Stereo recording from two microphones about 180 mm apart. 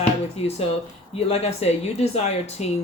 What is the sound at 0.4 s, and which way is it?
Speech, 35° left (ahead or behind).